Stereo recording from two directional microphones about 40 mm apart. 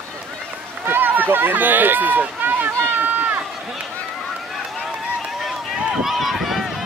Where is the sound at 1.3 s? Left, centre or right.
Right.